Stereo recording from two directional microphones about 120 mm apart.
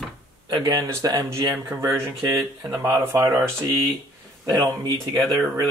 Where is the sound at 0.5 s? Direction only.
35° right (ahead or behind); by 3.3 s 20° right (ahead or behind).